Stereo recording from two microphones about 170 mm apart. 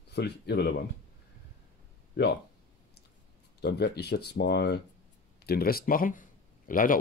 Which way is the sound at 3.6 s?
75° left (ahead or behind).